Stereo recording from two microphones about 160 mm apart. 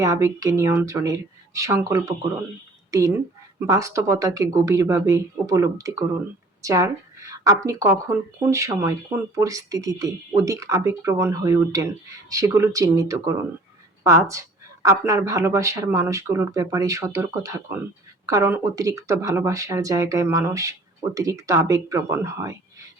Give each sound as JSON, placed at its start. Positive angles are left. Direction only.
{"t": 0.0, "sound": "a woman's voice", "side_deg": -20}